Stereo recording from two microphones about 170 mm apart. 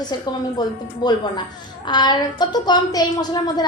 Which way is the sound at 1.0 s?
25° left (ahead or behind).